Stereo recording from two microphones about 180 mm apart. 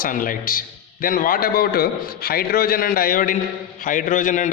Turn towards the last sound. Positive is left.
turn(degrees=45)  # may be behind; listen again after turning